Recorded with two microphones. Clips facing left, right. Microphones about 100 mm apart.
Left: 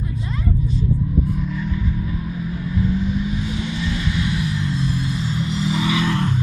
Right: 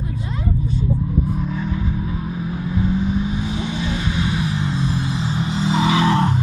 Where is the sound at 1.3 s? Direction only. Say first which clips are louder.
Right 1 dB; 35° right (ahead or behind).